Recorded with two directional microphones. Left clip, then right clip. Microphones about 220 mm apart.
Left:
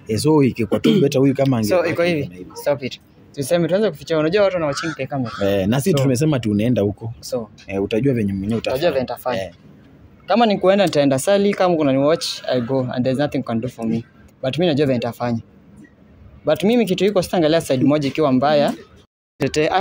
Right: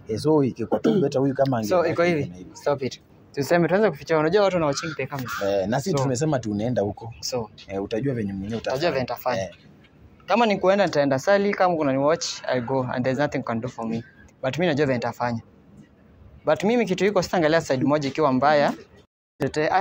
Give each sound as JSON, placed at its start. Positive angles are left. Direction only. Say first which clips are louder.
{"t": 0.0, "sound": "speech", "louder": "left 5 dB", "side_deg": 40}
{"t": 1.7, "sound": "a man's voice", "louder": "left 4 dB", "side_deg": 0}
{"t": 4.4, "sound": "speech", "louder": "left 3 dB", "side_deg": -15}
{"t": 4.7, "sound": "a man's voice", "louder": "left 4 dB", "side_deg": 5}
{"t": 5.4, "sound": "speech", "louder": "left 4 dB", "side_deg": 40}
{"t": 7.2, "sound": "speech", "louder": "left 3 dB", "side_deg": 10}
{"t": 7.7, "sound": "speech", "louder": "left 7 dB", "side_deg": 30}
{"t": 8.7, "sound": "speech", "louder": "left 4 dB", "side_deg": 10}
{"t": 10.9, "sound": "speech", "louder": "left 4 dB", "side_deg": 30}
{"t": 16.4, "sound": "speech", "louder": "left 4 dB", "side_deg": 25}